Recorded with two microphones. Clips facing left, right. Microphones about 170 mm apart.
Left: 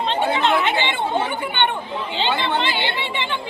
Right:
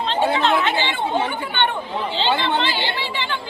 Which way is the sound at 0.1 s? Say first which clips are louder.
Right 1 dB; 20° left (ahead or behind).